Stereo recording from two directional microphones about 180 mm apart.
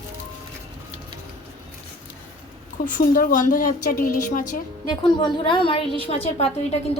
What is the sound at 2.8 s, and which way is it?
Speech, 50° left (ahead or behind).